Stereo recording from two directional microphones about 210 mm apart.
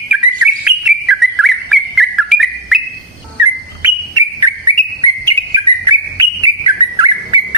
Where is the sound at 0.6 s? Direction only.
5° right (ahead or behind).